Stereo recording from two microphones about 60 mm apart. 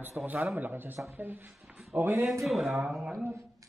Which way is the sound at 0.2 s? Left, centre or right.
Centre.